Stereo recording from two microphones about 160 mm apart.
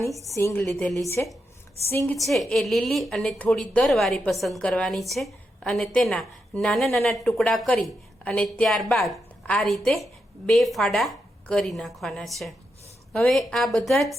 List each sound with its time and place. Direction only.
0.3 s a woman's voice: 15° left (ahead or behind)
2.1 s a woman's voice: centre (ahead or behind)